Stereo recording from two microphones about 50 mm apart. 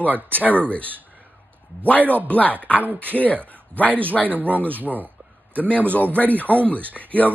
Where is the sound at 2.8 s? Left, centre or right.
Right.